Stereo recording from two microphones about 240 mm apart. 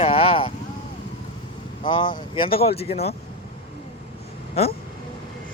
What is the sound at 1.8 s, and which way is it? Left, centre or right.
Speech, centre.